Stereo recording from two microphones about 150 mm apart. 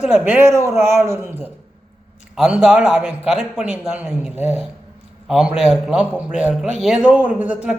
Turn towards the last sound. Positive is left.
turn(degrees=-10)  # may be behind; listen again after turning